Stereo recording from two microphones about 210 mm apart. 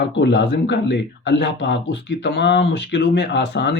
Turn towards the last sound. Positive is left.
turn(degrees=55)  # may be behind; listen again after turning